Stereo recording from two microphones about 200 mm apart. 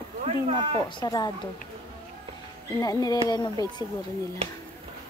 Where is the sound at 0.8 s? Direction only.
20° left (ahead or behind).